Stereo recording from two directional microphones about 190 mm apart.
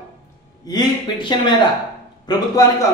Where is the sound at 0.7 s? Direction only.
20° left (ahead or behind).